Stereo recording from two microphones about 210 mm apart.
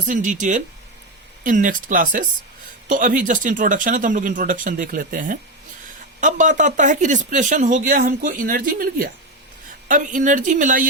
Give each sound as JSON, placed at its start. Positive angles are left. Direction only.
{"t": 0.1, "sound": "speech", "side_deg": -35}